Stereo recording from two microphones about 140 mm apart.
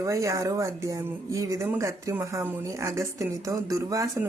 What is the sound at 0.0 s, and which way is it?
Speech, 25° right (ahead or behind).